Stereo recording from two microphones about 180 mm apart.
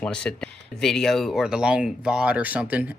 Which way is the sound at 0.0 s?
5° left (ahead or behind).